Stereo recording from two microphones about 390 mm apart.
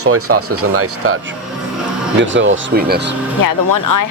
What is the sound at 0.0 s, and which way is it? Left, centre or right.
Speech, right.